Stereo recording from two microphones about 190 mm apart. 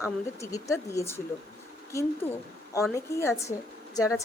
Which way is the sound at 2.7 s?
15° left (ahead or behind).